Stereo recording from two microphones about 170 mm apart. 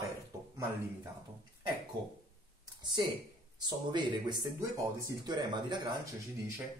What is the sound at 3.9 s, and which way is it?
Speech, 25° right (ahead or behind).